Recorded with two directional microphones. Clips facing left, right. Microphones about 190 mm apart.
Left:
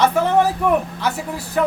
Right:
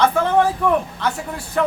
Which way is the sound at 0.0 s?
10° left (ahead or behind).